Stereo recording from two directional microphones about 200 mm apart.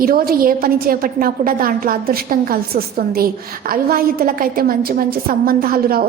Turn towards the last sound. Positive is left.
turn(degrees=-45)  # may be behind; listen again after turning